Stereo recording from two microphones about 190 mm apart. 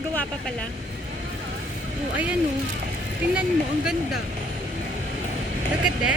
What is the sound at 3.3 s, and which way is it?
Speech, 5° right (ahead or behind).